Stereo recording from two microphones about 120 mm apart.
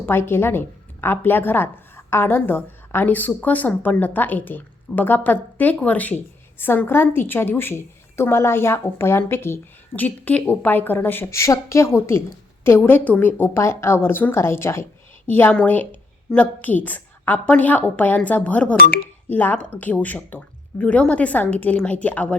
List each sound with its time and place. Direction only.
0.0 s a woman's voice: 20° left (ahead or behind)